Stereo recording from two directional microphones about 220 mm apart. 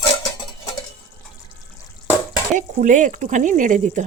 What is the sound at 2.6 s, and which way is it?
Speech, 35° right (ahead or behind).